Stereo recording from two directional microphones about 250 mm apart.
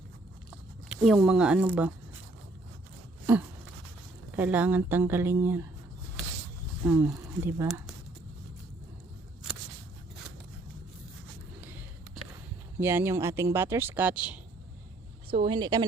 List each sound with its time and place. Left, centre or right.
0.9 s speech: centre
4.3 s speech: centre
6.8 s speech: centre
12.8 s speech: centre
15.3 s speech: centre